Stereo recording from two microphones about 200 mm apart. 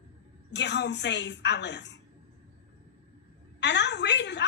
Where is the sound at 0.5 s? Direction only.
60° left (ahead or behind).